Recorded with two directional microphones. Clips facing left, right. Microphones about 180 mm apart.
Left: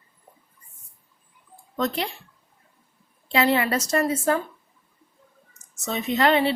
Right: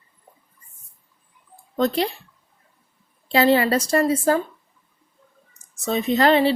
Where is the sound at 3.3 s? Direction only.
35° right (ahead or behind).